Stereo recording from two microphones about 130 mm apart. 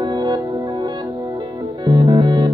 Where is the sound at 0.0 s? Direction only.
35° right (ahead or behind).